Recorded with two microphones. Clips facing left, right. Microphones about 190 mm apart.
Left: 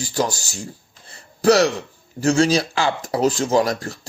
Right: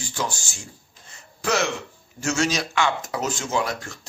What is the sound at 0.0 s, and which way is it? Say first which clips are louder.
Speech: left 7 dB; 40° left (ahead or behind).